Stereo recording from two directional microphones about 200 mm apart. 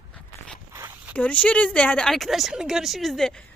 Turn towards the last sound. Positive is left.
turn(degrees=0)  # may be behind; listen again after turning